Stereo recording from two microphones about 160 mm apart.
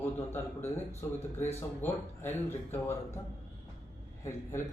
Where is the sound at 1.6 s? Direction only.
15° left (ahead or behind).